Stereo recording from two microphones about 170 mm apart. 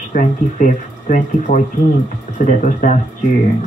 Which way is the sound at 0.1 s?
50° left (ahead or behind).